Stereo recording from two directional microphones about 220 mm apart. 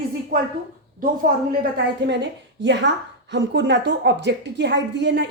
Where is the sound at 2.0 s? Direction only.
55° right (ahead or behind).